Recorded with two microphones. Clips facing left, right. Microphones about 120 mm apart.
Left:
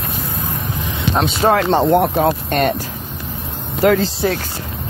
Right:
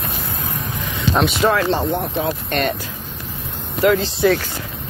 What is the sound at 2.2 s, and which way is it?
Speech, 40° left (ahead or behind).